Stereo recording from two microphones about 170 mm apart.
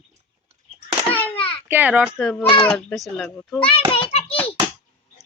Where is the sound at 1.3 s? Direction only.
30° left (ahead or behind).